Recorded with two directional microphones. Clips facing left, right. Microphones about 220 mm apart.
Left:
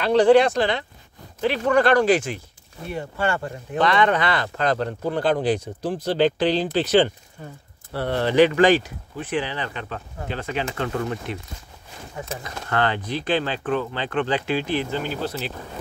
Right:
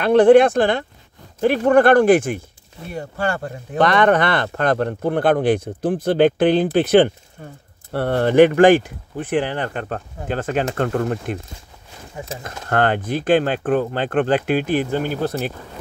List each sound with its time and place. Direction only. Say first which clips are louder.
0.0 s speech: right 4 dB; 55° right (ahead or behind)
2.9 s speech: right 1 dB; 40° right (ahead or behind)
12.4 s speech: right 5 dB; 50° right (ahead or behind)